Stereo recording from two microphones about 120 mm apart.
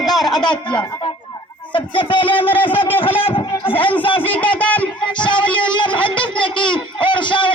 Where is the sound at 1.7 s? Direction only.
45° left (ahead or behind).